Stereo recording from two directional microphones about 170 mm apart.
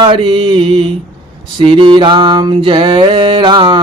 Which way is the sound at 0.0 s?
30° right (ahead or behind).